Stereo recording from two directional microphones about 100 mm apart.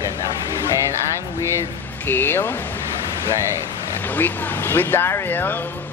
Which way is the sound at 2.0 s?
20° left (ahead or behind).